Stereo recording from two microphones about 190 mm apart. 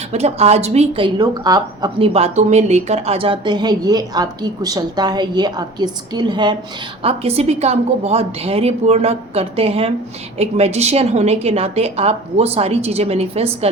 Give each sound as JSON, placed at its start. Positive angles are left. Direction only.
{"t": 0.1, "sound": "a woman's voice", "side_deg": -35}